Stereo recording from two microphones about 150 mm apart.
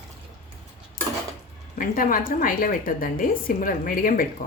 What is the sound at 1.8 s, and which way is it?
A woman's voice, 65° left (ahead or behind).